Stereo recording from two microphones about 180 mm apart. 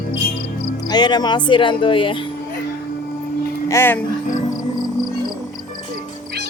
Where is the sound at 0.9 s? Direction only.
25° left (ahead or behind).